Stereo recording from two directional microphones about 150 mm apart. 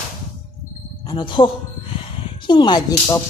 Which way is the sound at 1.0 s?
30° left (ahead or behind).